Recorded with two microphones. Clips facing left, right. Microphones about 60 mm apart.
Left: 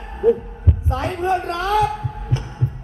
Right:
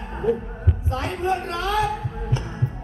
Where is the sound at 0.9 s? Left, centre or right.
Left.